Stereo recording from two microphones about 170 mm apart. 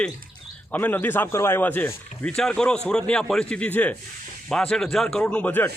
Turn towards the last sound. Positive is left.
turn(degrees=10)  # may be behind; listen again after turning